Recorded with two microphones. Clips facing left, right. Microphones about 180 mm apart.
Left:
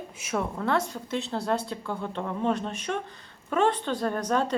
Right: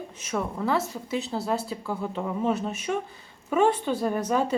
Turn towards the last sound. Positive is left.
turn(degrees=-10)  # may be behind; listen again after turning